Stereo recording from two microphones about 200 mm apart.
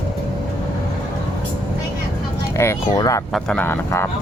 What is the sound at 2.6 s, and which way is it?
Speech, 15° left (ahead or behind).